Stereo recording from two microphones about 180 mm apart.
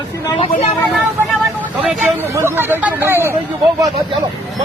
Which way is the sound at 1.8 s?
10° right (ahead or behind).